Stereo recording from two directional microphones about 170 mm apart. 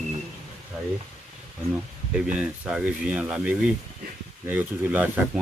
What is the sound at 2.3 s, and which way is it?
Speech, 5° right (ahead or behind).